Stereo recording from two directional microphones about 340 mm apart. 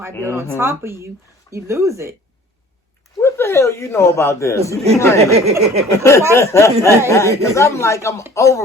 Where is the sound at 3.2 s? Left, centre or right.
Centre.